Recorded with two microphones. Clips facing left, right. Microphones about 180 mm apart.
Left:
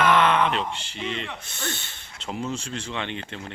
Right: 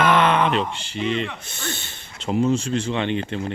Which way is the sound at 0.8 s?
10° right (ahead or behind).